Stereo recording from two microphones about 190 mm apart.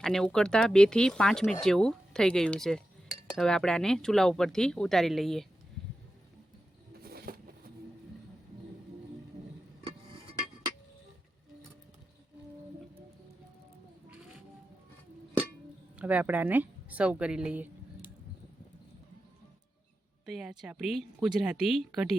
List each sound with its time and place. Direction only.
0.0 s speech: 5° left (ahead or behind)
7.0 s a sound: 55° right (ahead or behind)
16.0 s a woman's voice: 5° right (ahead or behind)
20.2 s speech: 5° right (ahead or behind)